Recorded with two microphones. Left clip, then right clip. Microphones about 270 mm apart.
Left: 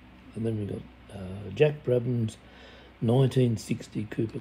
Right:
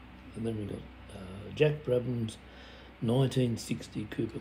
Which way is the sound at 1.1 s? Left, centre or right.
Centre.